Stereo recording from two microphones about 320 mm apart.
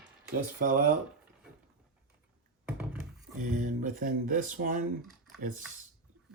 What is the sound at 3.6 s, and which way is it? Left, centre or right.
Speech, right.